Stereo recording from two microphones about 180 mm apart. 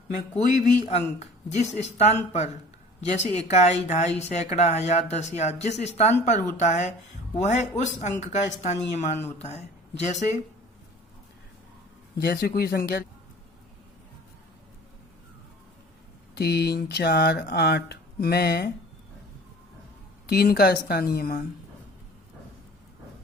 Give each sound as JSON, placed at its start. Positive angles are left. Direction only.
{"t": 0.3, "sound": "speech", "side_deg": 40}
{"t": 12.1, "sound": "speech", "side_deg": 60}
{"t": 16.3, "sound": "speech", "side_deg": 65}
{"t": 20.2, "sound": "speech", "side_deg": 60}